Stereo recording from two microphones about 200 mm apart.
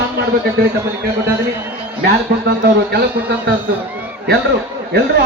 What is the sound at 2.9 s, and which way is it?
Speech, 55° right (ahead or behind).